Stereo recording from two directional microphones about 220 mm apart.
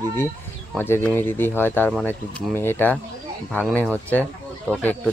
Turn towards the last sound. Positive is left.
turn(degrees=5)  # may be behind; listen again after turning